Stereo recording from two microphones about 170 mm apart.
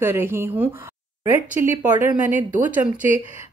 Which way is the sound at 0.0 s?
15° right (ahead or behind).